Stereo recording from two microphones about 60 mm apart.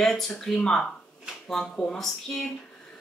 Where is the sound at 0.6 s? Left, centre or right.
Centre.